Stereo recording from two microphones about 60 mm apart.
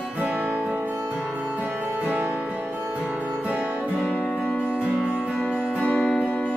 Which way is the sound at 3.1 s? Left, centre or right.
Right.